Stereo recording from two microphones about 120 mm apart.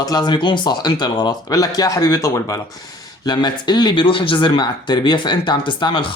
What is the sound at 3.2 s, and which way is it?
Speech, 35° left (ahead or behind).